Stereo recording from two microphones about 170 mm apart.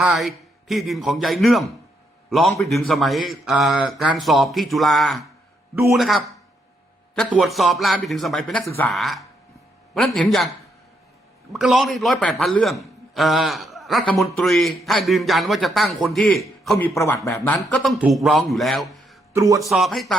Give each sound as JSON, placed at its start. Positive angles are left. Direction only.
{"t": 0.0, "sound": "speech", "side_deg": 0}
{"t": 8.6, "sound": "a man's voice", "side_deg": 15}
{"t": 8.9, "sound": "speech", "side_deg": 0}
{"t": 11.5, "sound": "speech", "side_deg": 0}
{"t": 16.7, "sound": "a man's voice", "side_deg": 15}
{"t": 19.3, "sound": "a man's voice", "side_deg": -20}
{"t": 19.5, "sound": "speech", "side_deg": 0}